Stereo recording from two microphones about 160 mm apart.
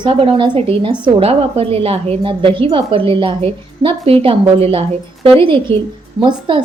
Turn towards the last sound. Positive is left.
turn(degrees=-30)  # may be behind; listen again after turning